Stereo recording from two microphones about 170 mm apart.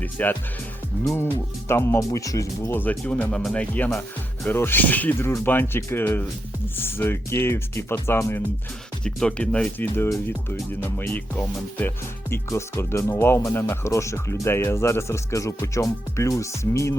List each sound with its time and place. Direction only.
0.0 s speech: 10° left (ahead or behind)
1.6 s speech: 15° left (ahead or behind)